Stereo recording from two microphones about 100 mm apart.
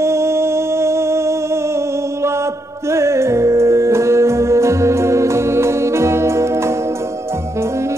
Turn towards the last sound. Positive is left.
turn(degrees=-30)  # may be behind; listen again after turning